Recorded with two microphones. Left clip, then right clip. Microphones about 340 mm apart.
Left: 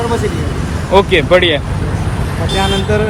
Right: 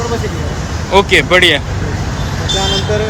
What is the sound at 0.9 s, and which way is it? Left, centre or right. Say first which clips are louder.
Speech: even; centre.